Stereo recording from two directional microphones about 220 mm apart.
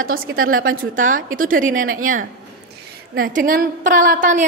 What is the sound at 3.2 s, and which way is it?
A woman's voice, 40° right (ahead or behind).